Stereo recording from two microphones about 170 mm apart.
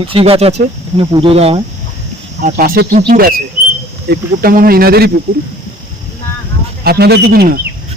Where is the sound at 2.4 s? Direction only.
55° right (ahead or behind).